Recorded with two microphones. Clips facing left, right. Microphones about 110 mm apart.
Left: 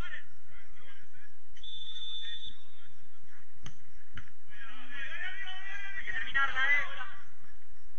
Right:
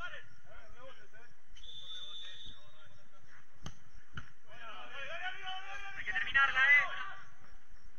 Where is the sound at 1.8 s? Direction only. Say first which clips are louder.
Left 2 dB; 50° right (ahead or behind).